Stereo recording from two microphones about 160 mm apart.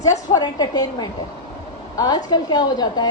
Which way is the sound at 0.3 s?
25° left (ahead or behind).